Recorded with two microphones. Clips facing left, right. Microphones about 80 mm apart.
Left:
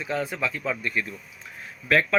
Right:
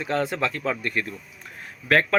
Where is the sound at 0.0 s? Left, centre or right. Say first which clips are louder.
Right 3 dB; right.